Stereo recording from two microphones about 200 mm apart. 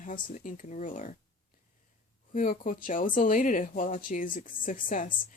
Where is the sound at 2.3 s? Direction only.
40° left (ahead or behind).